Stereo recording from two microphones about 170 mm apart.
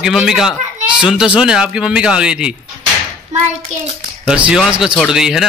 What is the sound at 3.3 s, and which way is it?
Hands, 45° right (ahead or behind).